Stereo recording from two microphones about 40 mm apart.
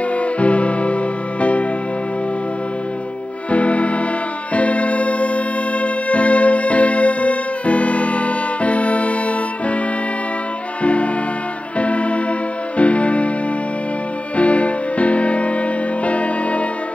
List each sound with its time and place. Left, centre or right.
0.2 s music: left
3.4 s music: left
4.6 s organ: left
10.8 s music: left
14.3 s music: left